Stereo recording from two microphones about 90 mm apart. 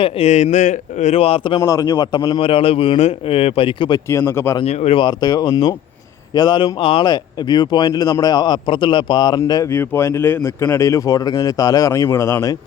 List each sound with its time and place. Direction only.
0.2 s speech: 90° left
1.5 s speech: 40° left (ahead or behind)
2.4 s speech: 90° left
4.1 s a man's voice: 30° left (ahead or behind)
4.5 s speech: 55° left (ahead or behind)
6.7 s speech: 85° left
7.0 s speech: 50° left (ahead or behind)
9.5 s a man's voice: 40° left (ahead or behind)
9.7 s a man's voice: 25° left (ahead or behind)